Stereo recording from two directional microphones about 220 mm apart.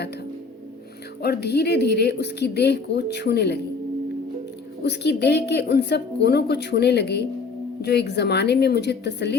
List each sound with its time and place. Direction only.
1.2 s a woman's voice: 45° left (ahead or behind)
4.8 s a woman's voice: 50° left (ahead or behind)